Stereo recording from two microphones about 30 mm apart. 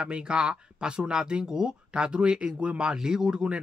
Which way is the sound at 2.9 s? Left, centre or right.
Right.